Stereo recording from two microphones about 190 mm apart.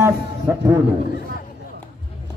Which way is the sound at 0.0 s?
15° right (ahead or behind).